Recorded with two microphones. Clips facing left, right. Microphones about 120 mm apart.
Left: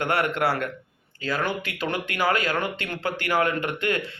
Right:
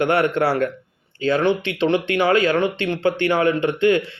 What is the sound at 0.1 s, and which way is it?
Speech, 30° right (ahead or behind).